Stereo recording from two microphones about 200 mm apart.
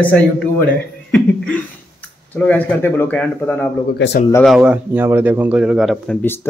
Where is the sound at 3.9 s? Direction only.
60° left (ahead or behind).